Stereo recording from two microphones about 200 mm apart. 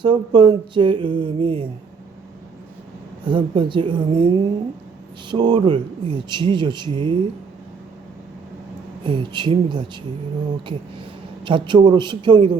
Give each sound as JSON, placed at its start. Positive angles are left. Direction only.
{"t": 0.0, "sound": "speech", "side_deg": -25}
{"t": 3.2, "sound": "speech", "side_deg": -25}
{"t": 9.0, "sound": "speech", "side_deg": -25}
{"t": 11.4, "sound": "speech", "side_deg": -25}